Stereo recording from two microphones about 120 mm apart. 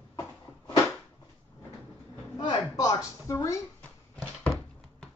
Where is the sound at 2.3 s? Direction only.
35° left (ahead or behind).